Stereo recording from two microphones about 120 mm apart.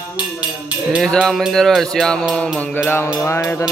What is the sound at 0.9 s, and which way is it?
Music, 5° left (ahead or behind).